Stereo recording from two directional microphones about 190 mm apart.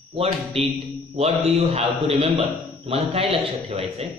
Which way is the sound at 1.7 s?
30° right (ahead or behind).